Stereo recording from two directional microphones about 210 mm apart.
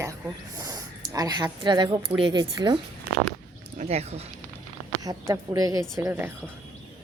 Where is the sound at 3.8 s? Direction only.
30° right (ahead or behind).